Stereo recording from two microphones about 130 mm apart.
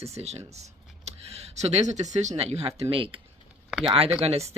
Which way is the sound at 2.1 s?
60° right (ahead or behind).